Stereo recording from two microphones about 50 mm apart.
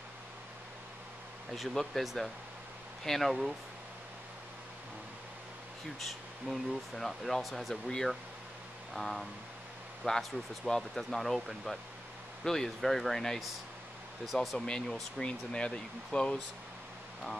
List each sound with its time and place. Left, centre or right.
1.5 s speech: centre
5.9 s speech: centre
14.2 s speech: centre
14.7 s speech: centre